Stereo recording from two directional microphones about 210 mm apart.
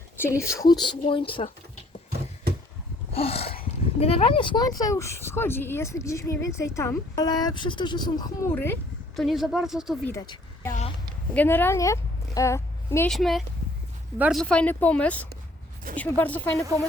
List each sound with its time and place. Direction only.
0.2 s speech: 15° left (ahead or behind)
3.1 s a sound: 30° left (ahead or behind)
3.6 s speech: 25° left (ahead or behind); by 10.1 s centre (ahead or behind)
10.1 s speech: 15° left (ahead or behind)
13.1 s speech: centre (ahead or behind)